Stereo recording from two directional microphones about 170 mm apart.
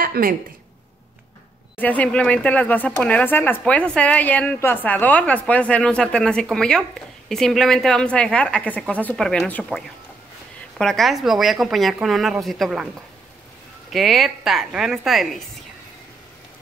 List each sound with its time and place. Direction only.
0.0 s speech: 55° right (ahead or behind)
1.8 s a woman's voice: 10° left (ahead or behind)
13.8 s a woman's voice: centre (ahead or behind)